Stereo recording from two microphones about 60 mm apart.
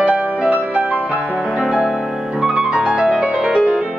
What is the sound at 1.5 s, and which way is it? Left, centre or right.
Music, centre.